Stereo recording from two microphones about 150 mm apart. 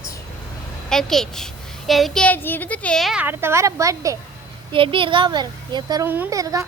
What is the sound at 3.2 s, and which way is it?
Speech, 15° right (ahead or behind).